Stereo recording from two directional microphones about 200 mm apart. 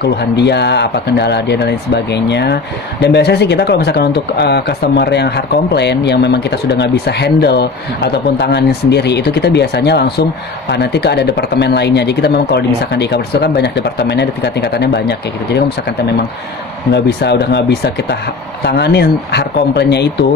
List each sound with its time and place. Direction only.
0.0 s speech: 55° left (ahead or behind)
16.9 s speech: 55° left (ahead or behind)